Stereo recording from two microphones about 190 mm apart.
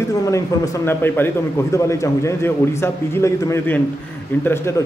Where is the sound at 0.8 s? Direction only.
10° left (ahead or behind).